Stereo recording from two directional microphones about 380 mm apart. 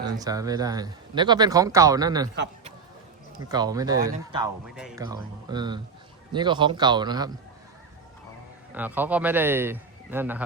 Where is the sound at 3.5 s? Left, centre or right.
Centre.